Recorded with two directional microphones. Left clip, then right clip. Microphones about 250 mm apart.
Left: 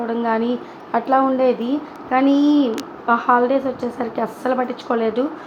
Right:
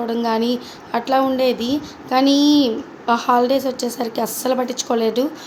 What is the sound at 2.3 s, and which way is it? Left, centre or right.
Speech, left.